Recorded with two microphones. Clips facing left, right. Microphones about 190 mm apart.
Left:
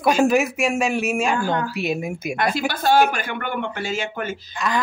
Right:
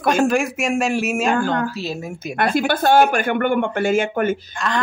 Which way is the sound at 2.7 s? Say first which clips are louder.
Right 2 dB; 55° right (ahead or behind).